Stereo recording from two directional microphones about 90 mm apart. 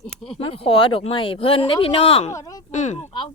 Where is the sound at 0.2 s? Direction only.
90° left.